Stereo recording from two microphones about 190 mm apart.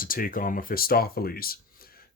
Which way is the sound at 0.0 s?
50° left (ahead or behind).